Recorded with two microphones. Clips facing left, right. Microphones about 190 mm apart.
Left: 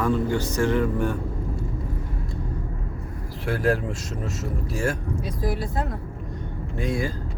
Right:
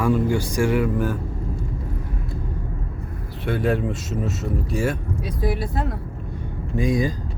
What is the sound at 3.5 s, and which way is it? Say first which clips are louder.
A man's voice: right 1 dB; centre (ahead or behind).